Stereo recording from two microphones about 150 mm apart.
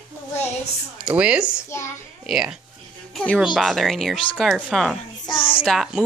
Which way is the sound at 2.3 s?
5° right (ahead or behind).